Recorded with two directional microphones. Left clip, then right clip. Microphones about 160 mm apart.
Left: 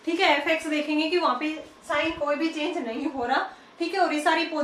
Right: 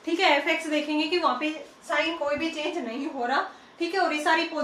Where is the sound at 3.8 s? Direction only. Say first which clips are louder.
Left 2 dB; 20° left (ahead or behind).